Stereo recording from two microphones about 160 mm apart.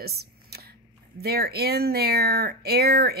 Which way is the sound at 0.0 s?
80° right.